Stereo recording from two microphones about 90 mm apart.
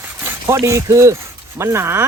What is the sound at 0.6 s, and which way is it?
Speech, 35° right (ahead or behind).